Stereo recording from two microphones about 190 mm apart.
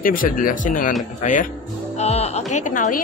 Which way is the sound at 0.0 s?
50° left (ahead or behind).